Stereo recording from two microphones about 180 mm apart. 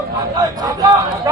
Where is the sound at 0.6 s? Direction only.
20° right (ahead or behind).